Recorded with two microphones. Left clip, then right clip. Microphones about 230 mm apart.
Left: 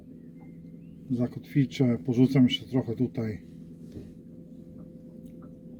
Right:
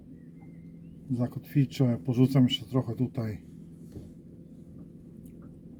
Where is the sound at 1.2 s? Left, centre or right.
Centre.